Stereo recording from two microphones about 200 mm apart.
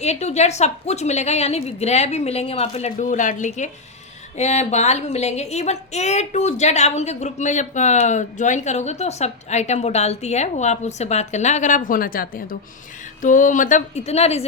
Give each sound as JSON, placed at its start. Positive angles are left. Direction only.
{"t": 0.0, "sound": "a woman's voice", "side_deg": 35}